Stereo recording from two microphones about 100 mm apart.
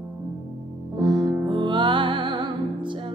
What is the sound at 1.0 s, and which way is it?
Music, 45° right (ahead or behind).